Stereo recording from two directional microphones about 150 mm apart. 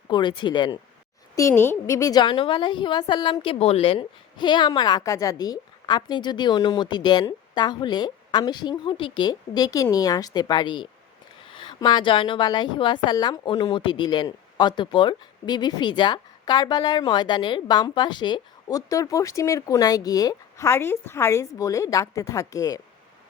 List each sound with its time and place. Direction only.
0.1 s speech: 30° left (ahead or behind)
1.4 s a woman's voice: 15° left (ahead or behind)